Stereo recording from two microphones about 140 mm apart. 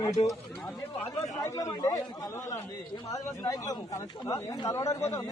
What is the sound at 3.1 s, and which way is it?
Speech, 25° left (ahead or behind).